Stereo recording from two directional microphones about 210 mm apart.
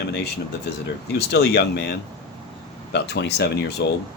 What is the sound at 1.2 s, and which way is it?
Speech, 50° left (ahead or behind).